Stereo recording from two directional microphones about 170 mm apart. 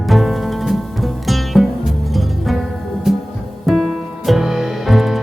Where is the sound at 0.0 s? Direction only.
Centre (ahead or behind).